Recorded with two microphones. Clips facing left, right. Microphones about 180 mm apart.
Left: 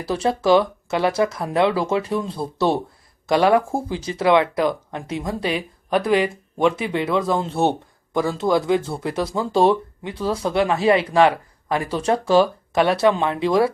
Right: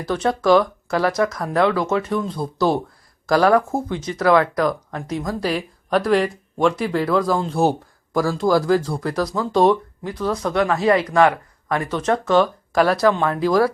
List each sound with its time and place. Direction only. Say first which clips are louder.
0.0 s speech: right 1 dB; 30° left (ahead or behind)
5.4 s speech: right 1 dB; centre (ahead or behind)
9.0 s speech: right 1 dB; 25° left (ahead or behind)
12.4 s speech: even; 5° left (ahead or behind)
12.9 s speech: even; 25° left (ahead or behind)